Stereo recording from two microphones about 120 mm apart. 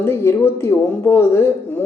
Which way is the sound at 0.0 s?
20° left (ahead or behind).